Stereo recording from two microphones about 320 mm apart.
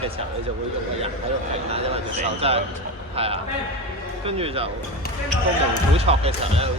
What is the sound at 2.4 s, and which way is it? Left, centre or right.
Speech, centre.